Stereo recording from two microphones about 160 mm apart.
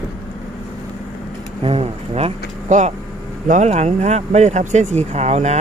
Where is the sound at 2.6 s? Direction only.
50° right (ahead or behind).